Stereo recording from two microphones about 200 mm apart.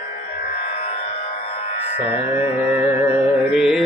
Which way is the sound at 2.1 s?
30° left (ahead or behind).